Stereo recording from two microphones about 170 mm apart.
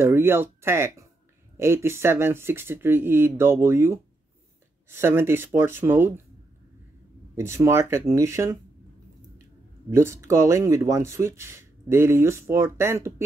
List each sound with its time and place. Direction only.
0.0 s speech: 15° right (ahead or behind)
7.3 s speech: 15° right (ahead or behind)
9.8 s speech: 15° right (ahead or behind)